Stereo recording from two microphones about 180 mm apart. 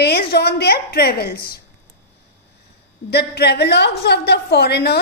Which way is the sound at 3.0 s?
65° left (ahead or behind).